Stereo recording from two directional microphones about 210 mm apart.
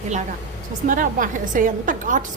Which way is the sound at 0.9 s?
40° right (ahead or behind).